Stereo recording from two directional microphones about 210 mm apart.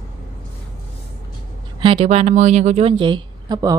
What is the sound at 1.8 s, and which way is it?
A woman's voice, 25° right (ahead or behind).